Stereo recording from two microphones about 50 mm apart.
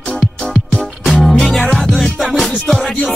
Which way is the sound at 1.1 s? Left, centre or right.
Centre.